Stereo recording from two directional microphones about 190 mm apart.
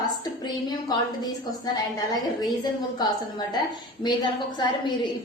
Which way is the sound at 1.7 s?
20° left (ahead or behind).